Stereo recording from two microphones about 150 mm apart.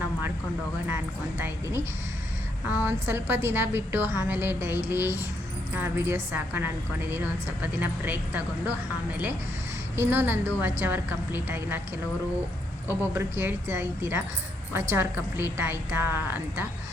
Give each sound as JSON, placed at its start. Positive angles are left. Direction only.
{"t": 0.9, "sound": "a woman's voice", "side_deg": -15}
{"t": 9.9, "sound": "a woman's voice", "side_deg": -15}
{"t": 12.9, "sound": "a woman's voice", "side_deg": -15}